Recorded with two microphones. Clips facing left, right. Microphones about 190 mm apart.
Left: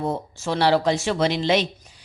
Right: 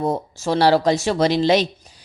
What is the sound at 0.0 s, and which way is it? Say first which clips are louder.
Speech: right 4 dB; 40° right (ahead or behind).